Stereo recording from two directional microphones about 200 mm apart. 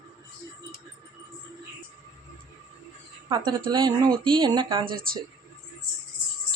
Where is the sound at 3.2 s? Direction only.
20° right (ahead or behind).